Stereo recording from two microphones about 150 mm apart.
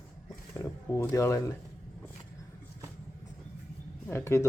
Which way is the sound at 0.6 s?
15° left (ahead or behind).